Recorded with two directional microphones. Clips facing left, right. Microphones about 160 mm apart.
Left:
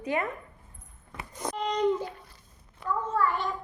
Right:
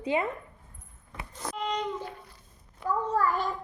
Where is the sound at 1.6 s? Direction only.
40° left (ahead or behind).